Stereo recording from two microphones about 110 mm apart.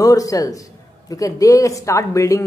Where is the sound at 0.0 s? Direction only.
30° left (ahead or behind).